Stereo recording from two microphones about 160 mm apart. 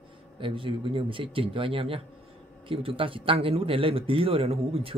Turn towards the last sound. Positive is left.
turn(degrees=-35)  # may be behind; listen again after turning